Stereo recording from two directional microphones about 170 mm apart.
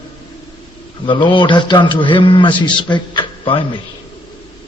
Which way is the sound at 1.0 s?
30° left (ahead or behind).